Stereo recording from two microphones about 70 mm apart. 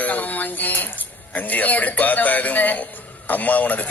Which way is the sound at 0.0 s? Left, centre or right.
Left.